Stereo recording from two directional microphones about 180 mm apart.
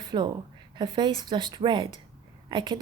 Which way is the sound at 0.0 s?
25° right (ahead or behind).